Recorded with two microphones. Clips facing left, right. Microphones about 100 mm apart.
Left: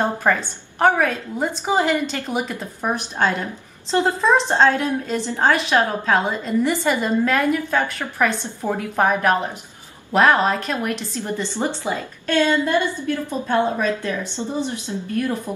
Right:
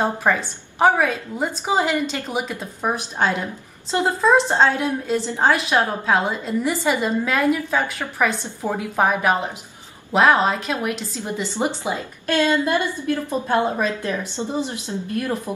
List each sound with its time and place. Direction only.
0.0 s a woman's voice: 5° right (ahead or behind)
11.5 s a woman's voice: 15° right (ahead or behind)